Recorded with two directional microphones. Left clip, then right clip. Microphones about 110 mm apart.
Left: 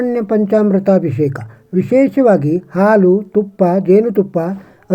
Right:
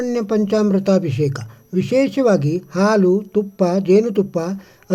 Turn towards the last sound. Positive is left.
turn(degrees=-15)  # may be behind; listen again after turning